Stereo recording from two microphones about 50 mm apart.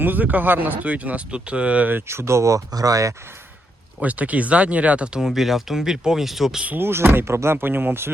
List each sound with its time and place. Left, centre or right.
0.0 s speech: right
2.0 s speech: right
4.0 s speech: right
5.1 s speech: centre
6.7 s speech: right
7.3 s speech: right